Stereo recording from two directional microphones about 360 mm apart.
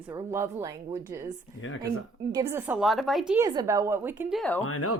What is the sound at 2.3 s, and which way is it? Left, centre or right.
A woman's voice, centre.